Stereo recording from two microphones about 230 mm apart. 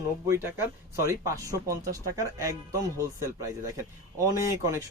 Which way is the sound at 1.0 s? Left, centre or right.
Centre.